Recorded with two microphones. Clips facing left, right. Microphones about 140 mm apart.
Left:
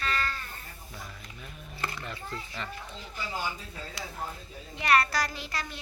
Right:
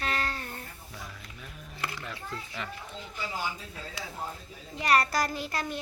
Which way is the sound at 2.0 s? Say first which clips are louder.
Even; centre (ahead or behind).